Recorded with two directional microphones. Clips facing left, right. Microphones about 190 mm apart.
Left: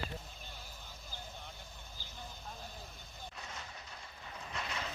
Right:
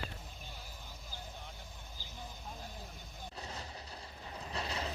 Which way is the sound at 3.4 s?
35° right (ahead or behind).